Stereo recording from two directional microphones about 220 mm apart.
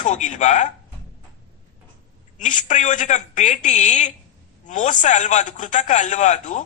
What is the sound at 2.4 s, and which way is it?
Speech, 35° left (ahead or behind).